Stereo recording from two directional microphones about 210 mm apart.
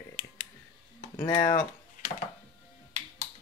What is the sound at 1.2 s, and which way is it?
Speech, 10° left (ahead or behind).